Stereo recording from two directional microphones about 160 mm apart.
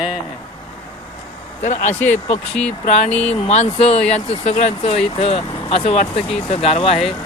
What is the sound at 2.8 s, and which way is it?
Speech, 40° left (ahead or behind).